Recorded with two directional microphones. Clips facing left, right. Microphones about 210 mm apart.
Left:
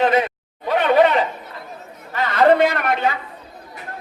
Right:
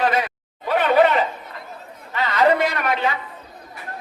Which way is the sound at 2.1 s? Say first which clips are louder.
Left 3 dB; 55° left (ahead or behind).